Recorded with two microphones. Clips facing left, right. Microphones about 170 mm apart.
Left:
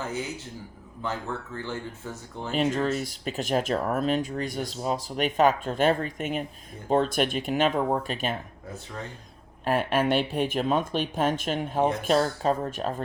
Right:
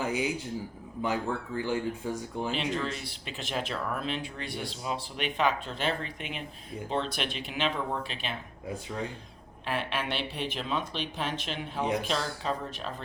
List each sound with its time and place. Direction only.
0.0 s a sound: 15° right (ahead or behind)
1.0 s speech: 10° right (ahead or behind)
2.5 s speech: 45° left (ahead or behind)
9.6 s speech: 45° left (ahead or behind)